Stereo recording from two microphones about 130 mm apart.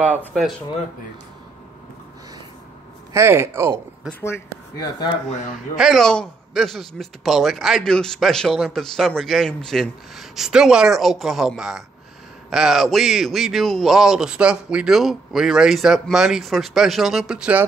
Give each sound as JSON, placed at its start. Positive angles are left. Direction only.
{"t": 3.1, "sound": "speech", "side_deg": -20}
{"t": 4.1, "sound": "speech", "side_deg": 20}
{"t": 5.8, "sound": "a man's voice", "side_deg": 0}